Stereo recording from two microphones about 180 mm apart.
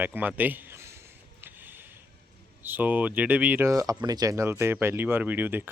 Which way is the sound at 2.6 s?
10° right (ahead or behind).